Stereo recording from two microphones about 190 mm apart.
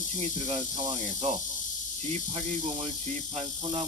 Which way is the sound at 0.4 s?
40° right (ahead or behind).